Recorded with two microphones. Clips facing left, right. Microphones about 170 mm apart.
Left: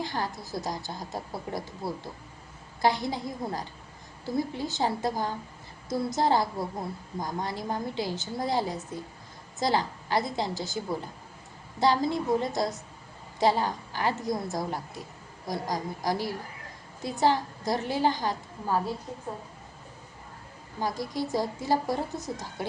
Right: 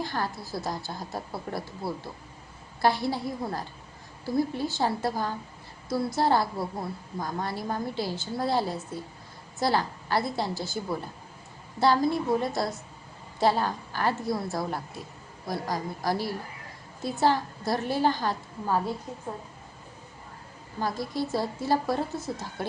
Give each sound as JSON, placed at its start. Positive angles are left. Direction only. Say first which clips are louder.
{"t": 0.0, "sound": "a woman's voice", "louder": "right 1 dB", "side_deg": 15}
{"t": 20.7, "sound": "a woman's voice", "louder": "right 1 dB", "side_deg": 15}